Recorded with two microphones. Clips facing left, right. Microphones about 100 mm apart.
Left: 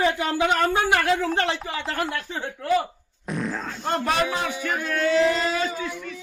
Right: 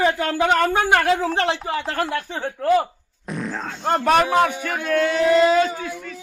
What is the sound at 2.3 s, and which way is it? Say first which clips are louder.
Speech: right 3 dB; 55° right (ahead or behind).